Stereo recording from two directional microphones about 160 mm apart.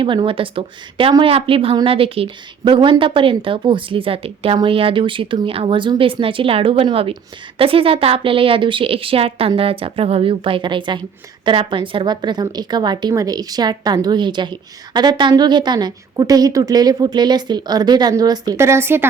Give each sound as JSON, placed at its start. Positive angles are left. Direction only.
{"t": 0.0, "sound": "a woman's voice", "side_deg": -30}